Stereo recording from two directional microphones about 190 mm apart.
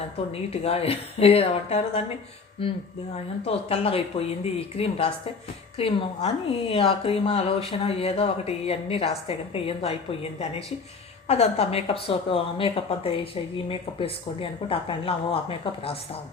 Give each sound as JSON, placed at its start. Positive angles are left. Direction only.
{"t": 0.5, "sound": "a woman's voice", "side_deg": 30}